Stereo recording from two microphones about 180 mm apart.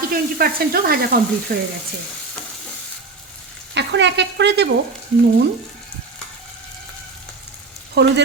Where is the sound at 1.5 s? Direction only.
50° right (ahead or behind).